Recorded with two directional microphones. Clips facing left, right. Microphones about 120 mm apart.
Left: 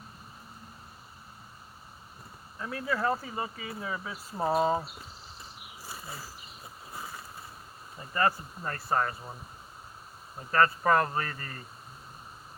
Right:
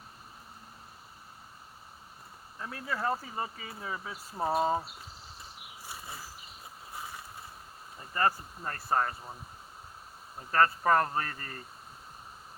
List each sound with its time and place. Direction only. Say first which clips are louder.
2.6 s speech: left 4 dB; 25° right (ahead or behind)
8.1 s speech: left 1 dB; 25° right (ahead or behind)
10.5 s speech: left 1 dB; 30° right (ahead or behind)